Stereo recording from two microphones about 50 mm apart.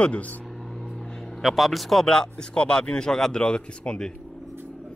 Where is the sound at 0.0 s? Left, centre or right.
Left.